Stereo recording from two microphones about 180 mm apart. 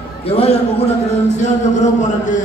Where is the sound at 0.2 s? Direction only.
35° left (ahead or behind).